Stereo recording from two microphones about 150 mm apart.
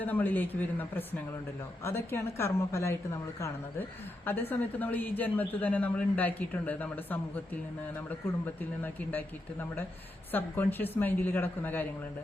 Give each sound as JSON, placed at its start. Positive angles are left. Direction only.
{"t": 0.0, "sound": "speech", "side_deg": 10}
{"t": 8.4, "sound": "speech", "side_deg": 10}